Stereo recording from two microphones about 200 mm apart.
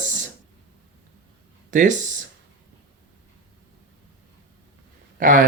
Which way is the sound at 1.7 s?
40° right (ahead or behind).